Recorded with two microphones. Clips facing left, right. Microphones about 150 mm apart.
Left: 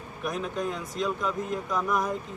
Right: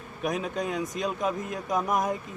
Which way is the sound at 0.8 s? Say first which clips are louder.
Right 1 dB; 20° right (ahead or behind).